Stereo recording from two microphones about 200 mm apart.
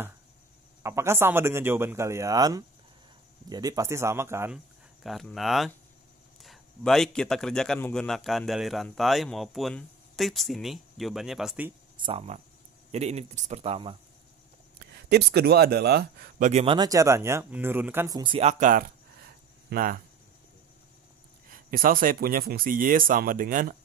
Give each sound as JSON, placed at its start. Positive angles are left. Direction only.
{"t": 0.8, "sound": "speech", "side_deg": -15}
{"t": 5.0, "sound": "a man's voice", "side_deg": 0}
{"t": 12.0, "sound": "speech", "side_deg": -30}
{"t": 15.0, "sound": "speech", "side_deg": -55}
{"t": 16.6, "sound": "speech", "side_deg": -20}
{"t": 21.5, "sound": "speech", "side_deg": -45}